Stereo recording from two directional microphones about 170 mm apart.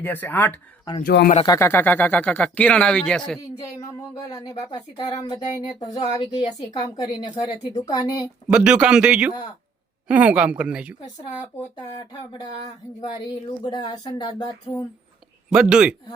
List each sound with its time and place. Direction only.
0.0 s speech: 10° left (ahead or behind)
1.0 s speech: 65° left (ahead or behind)
1.5 s speech: 15° left (ahead or behind)
4.3 s speech: 20° left (ahead or behind)
8.4 s a man's voice: 5° right (ahead or behind)
12.3 s speech: 25° left (ahead or behind)
15.5 s a man's voice: 5° right (ahead or behind)